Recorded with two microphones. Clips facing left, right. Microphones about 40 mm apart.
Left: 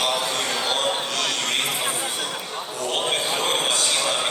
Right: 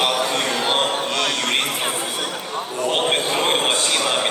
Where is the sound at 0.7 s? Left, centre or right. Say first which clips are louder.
Right 3 dB; right.